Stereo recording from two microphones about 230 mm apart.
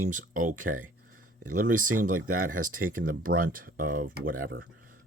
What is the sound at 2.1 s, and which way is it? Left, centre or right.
Speech, right.